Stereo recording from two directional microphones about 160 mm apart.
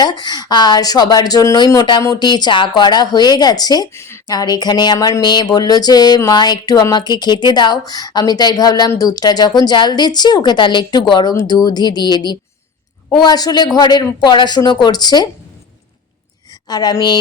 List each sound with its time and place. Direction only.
0.0 s speech: 25° left (ahead or behind)
16.6 s speech: 25° left (ahead or behind)